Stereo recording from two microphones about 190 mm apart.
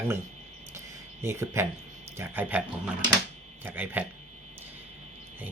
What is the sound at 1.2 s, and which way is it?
Speech, 15° right (ahead or behind).